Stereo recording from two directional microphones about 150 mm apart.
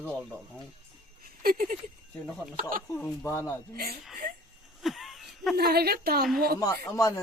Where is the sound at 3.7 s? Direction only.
90° right.